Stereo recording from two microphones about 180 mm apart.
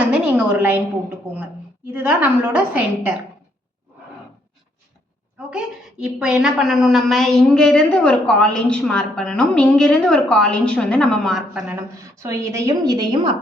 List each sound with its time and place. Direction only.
0.0 s a woman's voice: 5° right (ahead or behind)
1.9 s a woman's voice: 10° right (ahead or behind)
5.5 s a woman's voice: 5° right (ahead or behind)
11.7 s a woman's voice: 20° right (ahead or behind)